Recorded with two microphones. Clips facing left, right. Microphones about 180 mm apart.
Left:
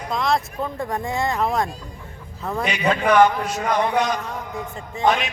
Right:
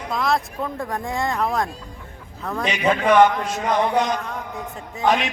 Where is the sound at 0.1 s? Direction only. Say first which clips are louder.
Even; centre (ahead or behind).